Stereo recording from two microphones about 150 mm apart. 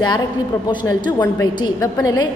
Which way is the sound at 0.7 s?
30° left (ahead or behind).